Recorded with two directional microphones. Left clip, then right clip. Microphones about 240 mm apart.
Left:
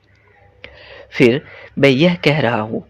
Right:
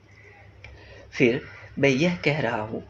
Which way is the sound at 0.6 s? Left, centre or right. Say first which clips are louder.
Left 11 dB; left.